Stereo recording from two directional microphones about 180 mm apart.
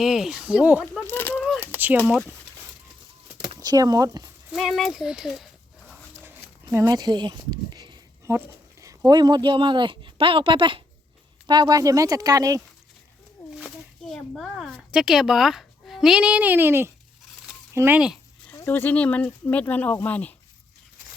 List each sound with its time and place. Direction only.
0.0 s speech: centre (ahead or behind)
0.9 s a sound: 10° left (ahead or behind)
3.6 s speech: 20° right (ahead or behind)
4.5 s speech: centre (ahead or behind)
6.2 s a sound: 15° right (ahead or behind)
9.0 s speech: 25° right (ahead or behind)
14.1 s speech: centre (ahead or behind)
18.5 s speech: 10° left (ahead or behind)